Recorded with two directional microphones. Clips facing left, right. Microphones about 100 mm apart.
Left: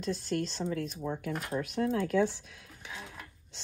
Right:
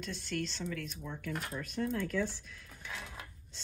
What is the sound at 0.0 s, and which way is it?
A woman's voice, 40° left (ahead or behind).